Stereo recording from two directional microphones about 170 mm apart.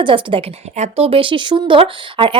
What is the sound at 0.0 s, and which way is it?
Speech, 30° right (ahead or behind).